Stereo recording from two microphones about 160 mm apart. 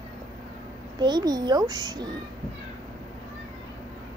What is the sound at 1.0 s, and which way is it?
A child's voice, 25° right (ahead or behind).